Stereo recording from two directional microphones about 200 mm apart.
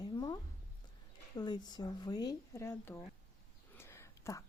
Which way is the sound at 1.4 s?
20° left (ahead or behind).